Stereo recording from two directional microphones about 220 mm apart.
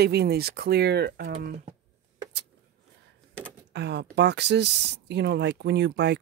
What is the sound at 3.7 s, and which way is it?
Speech, 50° right (ahead or behind).